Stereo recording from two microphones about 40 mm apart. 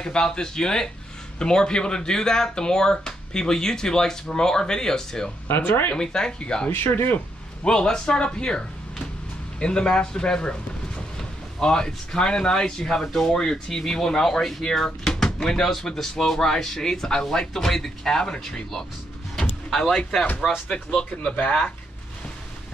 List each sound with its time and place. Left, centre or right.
0.0 s speech: left
5.5 s speech: left
5.9 s speech: centre
6.7 s speech: left
7.6 s speech: centre
11.6 s speech: centre
20.6 s speech: left